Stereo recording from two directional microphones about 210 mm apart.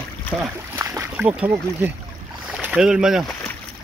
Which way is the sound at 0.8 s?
15° right (ahead or behind).